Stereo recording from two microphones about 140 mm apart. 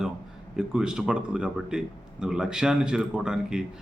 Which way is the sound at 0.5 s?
5° right (ahead or behind).